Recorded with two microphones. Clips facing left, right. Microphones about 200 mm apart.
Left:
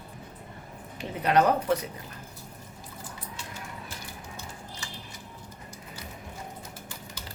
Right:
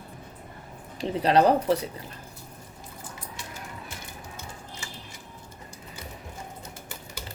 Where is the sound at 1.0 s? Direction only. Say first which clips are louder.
Right 3 dB; 30° right (ahead or behind).